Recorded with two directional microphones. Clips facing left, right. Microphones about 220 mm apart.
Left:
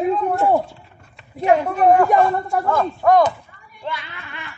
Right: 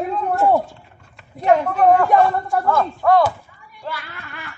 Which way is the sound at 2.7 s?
15° left (ahead or behind).